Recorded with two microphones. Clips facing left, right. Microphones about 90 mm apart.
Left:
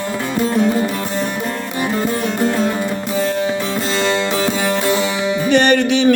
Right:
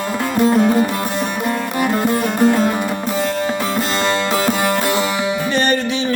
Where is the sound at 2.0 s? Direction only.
10° right (ahead or behind).